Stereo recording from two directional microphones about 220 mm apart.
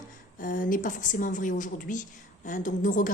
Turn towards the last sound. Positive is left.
turn(degrees=35)  # may be behind; listen again after turning